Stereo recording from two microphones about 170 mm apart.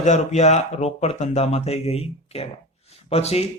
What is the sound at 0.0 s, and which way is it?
A man's voice, 40° left (ahead or behind).